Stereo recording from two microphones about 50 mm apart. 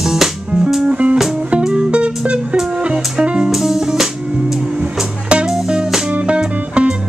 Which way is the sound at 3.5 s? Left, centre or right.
Centre.